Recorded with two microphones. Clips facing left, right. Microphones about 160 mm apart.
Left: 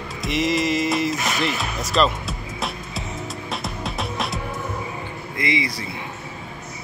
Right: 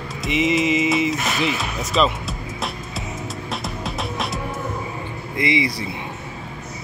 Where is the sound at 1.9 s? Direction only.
Centre (ahead or behind).